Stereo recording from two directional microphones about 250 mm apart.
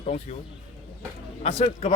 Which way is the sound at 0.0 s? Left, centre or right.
Left.